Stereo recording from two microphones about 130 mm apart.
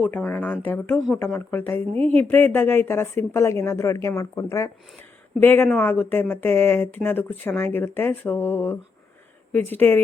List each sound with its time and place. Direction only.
0.0 s speech: 10° left (ahead or behind)